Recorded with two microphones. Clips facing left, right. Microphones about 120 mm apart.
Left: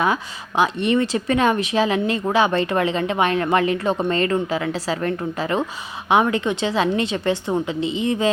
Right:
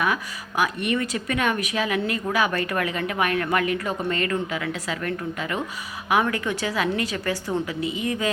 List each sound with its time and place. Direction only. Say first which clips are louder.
0.0 s speech: left 4 dB; 25° left (ahead or behind)